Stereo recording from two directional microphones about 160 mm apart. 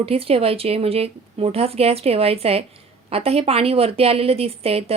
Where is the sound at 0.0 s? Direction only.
35° right (ahead or behind).